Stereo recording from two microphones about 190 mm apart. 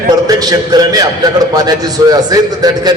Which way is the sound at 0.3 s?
20° right (ahead or behind).